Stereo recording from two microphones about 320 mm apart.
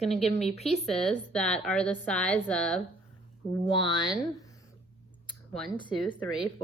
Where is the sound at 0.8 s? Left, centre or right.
Centre.